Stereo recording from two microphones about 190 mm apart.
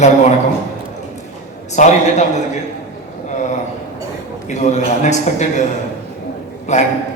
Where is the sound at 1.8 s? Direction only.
40° left (ahead or behind).